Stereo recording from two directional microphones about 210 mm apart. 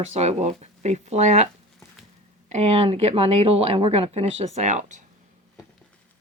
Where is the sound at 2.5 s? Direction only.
30° right (ahead or behind).